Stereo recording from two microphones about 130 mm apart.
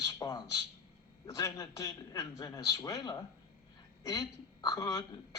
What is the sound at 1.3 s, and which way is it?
A man's voice, 25° left (ahead or behind).